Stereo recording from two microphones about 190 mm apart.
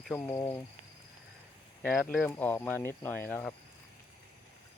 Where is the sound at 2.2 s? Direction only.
10° left (ahead or behind).